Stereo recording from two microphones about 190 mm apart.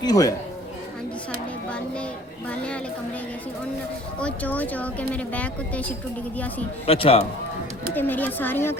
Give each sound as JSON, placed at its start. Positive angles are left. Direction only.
{"t": 0.0, "sound": "speech", "side_deg": 20}
{"t": 4.2, "sound": "speech", "side_deg": 5}
{"t": 6.8, "sound": "a man's voice", "side_deg": 30}
{"t": 7.9, "sound": "speech", "side_deg": 10}